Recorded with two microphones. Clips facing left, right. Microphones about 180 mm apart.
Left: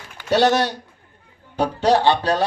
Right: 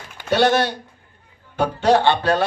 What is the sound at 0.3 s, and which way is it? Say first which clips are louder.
A man's voice: even; 40° left (ahead or behind).